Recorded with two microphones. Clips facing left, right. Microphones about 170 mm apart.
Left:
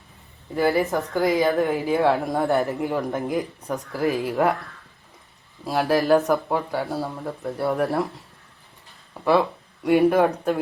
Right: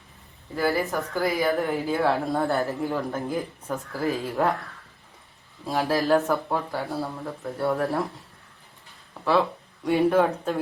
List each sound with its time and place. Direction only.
0.5 s speech: 20° left (ahead or behind)
5.6 s speech: 10° left (ahead or behind)
9.8 s speech: 15° left (ahead or behind)